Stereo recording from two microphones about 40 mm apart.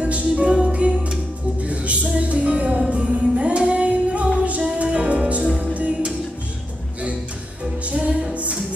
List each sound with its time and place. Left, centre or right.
0.0 s music: right
7.8 s music: right